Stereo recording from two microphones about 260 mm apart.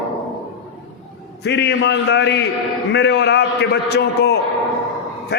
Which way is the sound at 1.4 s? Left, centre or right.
Left.